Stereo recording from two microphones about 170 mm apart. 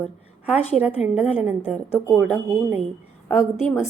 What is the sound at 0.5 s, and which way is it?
Speech, 40° left (ahead or behind).